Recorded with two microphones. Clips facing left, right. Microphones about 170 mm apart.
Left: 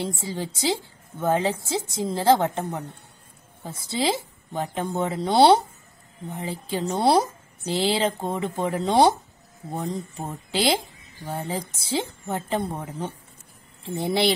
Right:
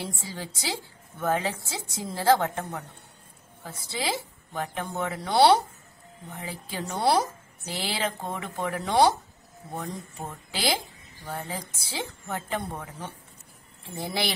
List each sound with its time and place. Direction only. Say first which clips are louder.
0.0 s speech: left 6 dB; 20° left (ahead or behind)
10.5 s speech: left 6 dB; 25° left (ahead or behind)